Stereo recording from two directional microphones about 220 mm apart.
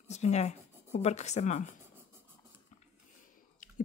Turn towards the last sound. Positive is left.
turn(degrees=35)  # may be behind; listen again after turning